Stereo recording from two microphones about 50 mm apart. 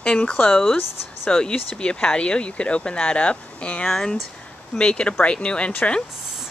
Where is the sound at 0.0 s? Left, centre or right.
Centre.